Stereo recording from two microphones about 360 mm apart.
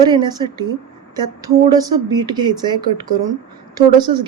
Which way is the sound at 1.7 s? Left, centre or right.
Centre.